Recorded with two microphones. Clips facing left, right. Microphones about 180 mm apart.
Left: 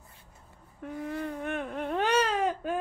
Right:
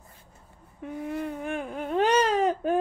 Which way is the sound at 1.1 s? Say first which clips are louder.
Right 2 dB; 10° right (ahead or behind).